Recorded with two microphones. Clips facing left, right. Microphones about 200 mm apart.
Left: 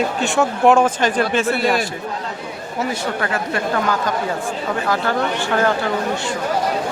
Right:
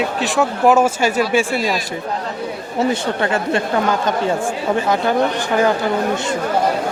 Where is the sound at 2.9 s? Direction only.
25° right (ahead or behind).